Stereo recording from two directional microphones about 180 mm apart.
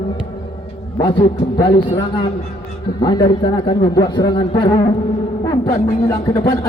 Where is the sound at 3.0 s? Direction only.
25° left (ahead or behind).